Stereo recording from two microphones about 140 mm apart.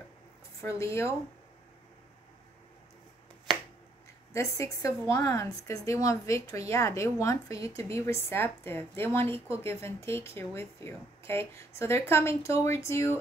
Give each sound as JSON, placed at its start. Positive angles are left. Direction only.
{"t": 0.6, "sound": "a woman's voice", "side_deg": 20}
{"t": 4.3, "sound": "a woman's voice", "side_deg": 20}